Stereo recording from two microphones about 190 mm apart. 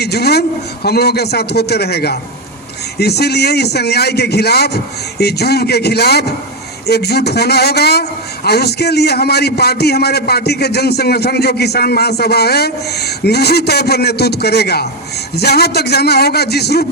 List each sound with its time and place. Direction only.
0.0 s a man's voice: 60° left (ahead or behind)